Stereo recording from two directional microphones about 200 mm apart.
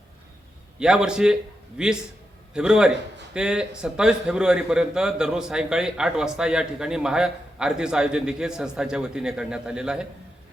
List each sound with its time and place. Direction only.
0.8 s a man's voice: 5° right (ahead or behind)